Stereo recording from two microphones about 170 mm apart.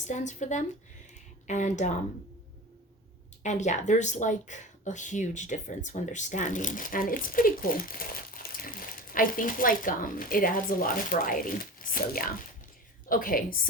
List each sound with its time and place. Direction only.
0.0 s speech: 45° left (ahead or behind)
3.4 s a woman's voice: 45° left (ahead or behind)